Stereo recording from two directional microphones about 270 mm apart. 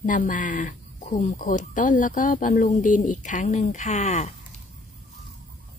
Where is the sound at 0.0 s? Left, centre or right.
Left.